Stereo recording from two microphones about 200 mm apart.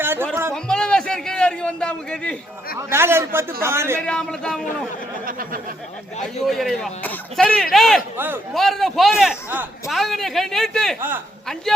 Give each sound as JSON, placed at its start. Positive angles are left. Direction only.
{"t": 0.0, "sound": "music", "side_deg": -10}
{"t": 0.5, "sound": "a man's voice", "side_deg": 5}
{"t": 2.7, "sound": "a man's voice", "side_deg": -10}
{"t": 4.0, "sound": "speech", "side_deg": 5}
{"t": 5.2, "sound": "speech", "side_deg": -45}
{"t": 6.2, "sound": "speech", "side_deg": 0}
{"t": 8.1, "sound": "a man's voice", "side_deg": -10}
{"t": 8.5, "sound": "speech", "side_deg": 0}